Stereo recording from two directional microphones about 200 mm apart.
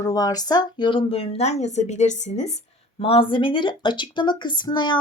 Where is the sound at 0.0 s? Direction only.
20° left (ahead or behind).